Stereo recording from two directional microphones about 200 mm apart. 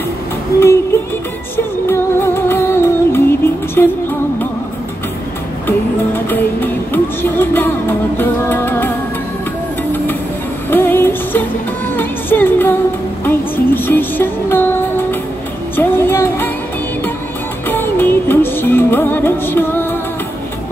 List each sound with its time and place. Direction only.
1.9 s music: 10° left (ahead or behind)
5.7 s music: 10° left (ahead or behind)
10.7 s music: 10° left (ahead or behind)
17.6 s music: 10° left (ahead or behind)